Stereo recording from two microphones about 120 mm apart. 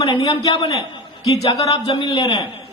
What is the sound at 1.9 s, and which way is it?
Speech, 45° left (ahead or behind).